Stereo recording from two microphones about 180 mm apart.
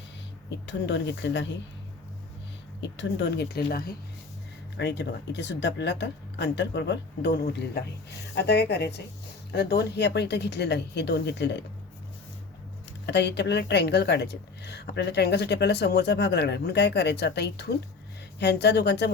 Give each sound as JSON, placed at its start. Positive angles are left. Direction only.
{"t": 0.7, "sound": "speech", "side_deg": 85}
{"t": 3.0, "sound": "speech", "side_deg": 80}
{"t": 4.8, "sound": "a woman's voice", "side_deg": 75}
{"t": 13.1, "sound": "a woman's voice", "side_deg": 75}